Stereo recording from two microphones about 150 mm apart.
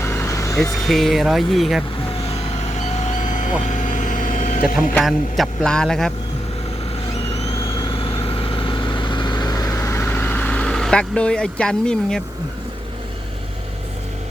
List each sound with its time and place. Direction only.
0.0 s vehicle: 20° left (ahead or behind)
0.9 s a man's voice: centre (ahead or behind)
2.6 s vehicle: 50° left (ahead or behind)
5.0 s a man's voice: 5° left (ahead or behind)
7.6 s vehicle: 35° left (ahead or behind); by 12.2 s 5° left (ahead or behind)